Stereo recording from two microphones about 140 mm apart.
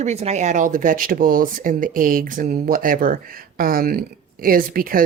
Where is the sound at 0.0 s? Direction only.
50° right (ahead or behind).